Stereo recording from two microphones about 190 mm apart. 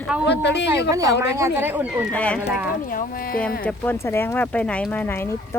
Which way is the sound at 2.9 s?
45° left (ahead or behind).